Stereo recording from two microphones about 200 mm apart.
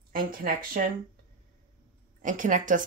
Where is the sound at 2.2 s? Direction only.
40° right (ahead or behind).